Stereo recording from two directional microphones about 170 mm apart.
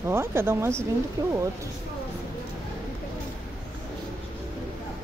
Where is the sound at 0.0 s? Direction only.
15° right (ahead or behind).